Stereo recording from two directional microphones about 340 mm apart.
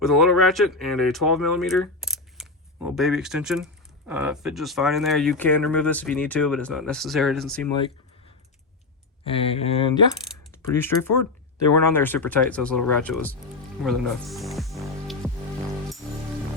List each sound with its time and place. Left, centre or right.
0.0 s speech: centre
9.2 s speech: centre
13.8 s music: centre